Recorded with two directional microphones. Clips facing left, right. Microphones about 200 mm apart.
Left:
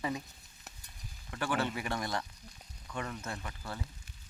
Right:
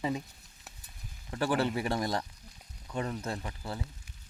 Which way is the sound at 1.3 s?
35° right (ahead or behind).